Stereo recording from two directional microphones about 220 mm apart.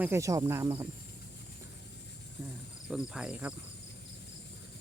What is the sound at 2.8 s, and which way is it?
Speech, 5° right (ahead or behind).